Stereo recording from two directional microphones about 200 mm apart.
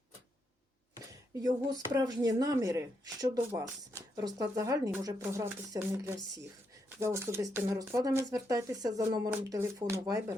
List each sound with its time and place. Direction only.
0.9 s speech: 20° right (ahead or behind)